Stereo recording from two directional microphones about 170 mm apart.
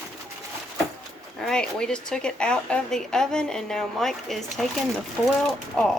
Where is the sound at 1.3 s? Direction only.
5° left (ahead or behind).